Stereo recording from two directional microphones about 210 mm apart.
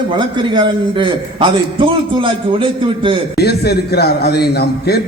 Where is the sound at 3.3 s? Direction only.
50° left (ahead or behind).